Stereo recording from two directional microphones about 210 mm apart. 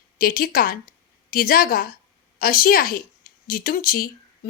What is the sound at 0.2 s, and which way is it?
A woman's voice, 45° left (ahead or behind).